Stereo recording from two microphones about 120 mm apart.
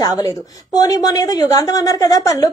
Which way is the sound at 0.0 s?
30° left (ahead or behind).